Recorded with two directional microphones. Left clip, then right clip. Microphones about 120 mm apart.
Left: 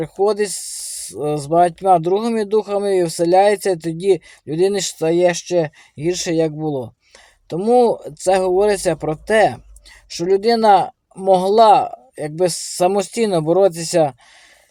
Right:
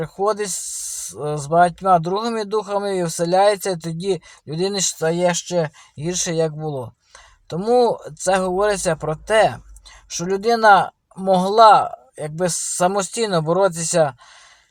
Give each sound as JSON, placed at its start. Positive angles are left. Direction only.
{"t": 1.2, "sound": "speech", "side_deg": 30}